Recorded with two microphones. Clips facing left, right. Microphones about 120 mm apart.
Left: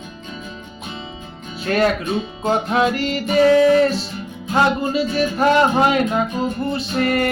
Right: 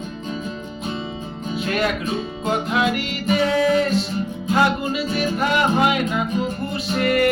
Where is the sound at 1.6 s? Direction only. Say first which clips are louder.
Left 5 dB; 40° left (ahead or behind).